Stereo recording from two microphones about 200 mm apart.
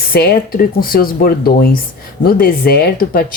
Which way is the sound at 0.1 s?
50° left (ahead or behind).